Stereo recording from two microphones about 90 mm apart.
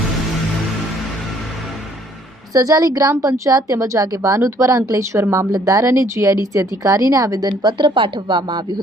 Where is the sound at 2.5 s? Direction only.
45° right (ahead or behind).